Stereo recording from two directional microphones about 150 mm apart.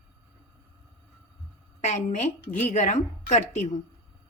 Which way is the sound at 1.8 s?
50° left (ahead or behind).